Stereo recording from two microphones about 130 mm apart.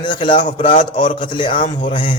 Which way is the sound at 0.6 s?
90° left.